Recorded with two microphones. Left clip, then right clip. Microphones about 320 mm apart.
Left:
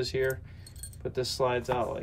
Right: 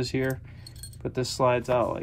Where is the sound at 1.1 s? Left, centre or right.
Centre.